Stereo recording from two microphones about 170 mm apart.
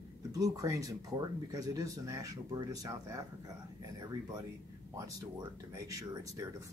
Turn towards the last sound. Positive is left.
turn(degrees=-20)  # may be behind; listen again after turning